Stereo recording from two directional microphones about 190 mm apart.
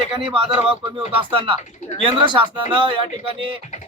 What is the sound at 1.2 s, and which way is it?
Speech, 30° right (ahead or behind).